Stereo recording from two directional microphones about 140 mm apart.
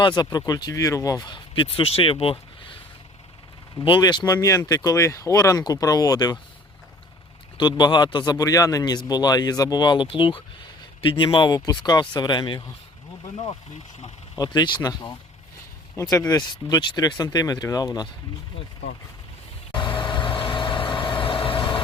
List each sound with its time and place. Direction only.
0.0 s speech: 30° left (ahead or behind)
3.8 s speech: 30° left (ahead or behind)
7.8 s speech: 30° left (ahead or behind)
14.3 s speech: 25° left (ahead or behind)
19.7 s vehicle: 35° left (ahead or behind)